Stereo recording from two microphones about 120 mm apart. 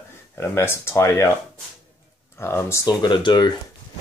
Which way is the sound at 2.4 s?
20° left (ahead or behind).